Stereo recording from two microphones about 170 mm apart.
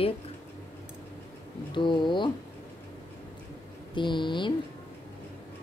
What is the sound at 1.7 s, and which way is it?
Speech, 30° left (ahead or behind).